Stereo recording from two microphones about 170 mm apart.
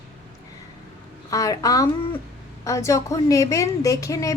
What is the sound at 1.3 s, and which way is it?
A woman's voice, 20° left (ahead or behind).